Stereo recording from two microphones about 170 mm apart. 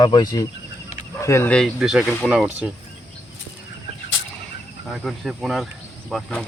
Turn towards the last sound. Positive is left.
turn(degrees=0)  # may be behind; listen again after turning